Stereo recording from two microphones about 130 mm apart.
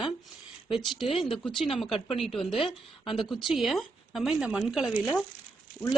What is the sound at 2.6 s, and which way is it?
Speech, 40° left (ahead or behind).